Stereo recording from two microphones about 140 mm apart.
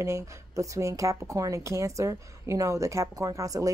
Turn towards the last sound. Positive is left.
turn(degrees=-25)  # may be behind; listen again after turning